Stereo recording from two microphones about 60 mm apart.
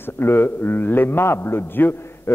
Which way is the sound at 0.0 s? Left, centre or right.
Left.